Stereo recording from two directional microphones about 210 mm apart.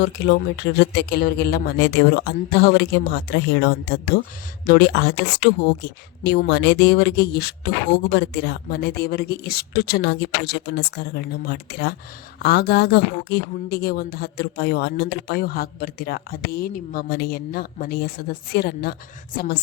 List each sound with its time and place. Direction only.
0.0 s speech: 55° left (ahead or behind)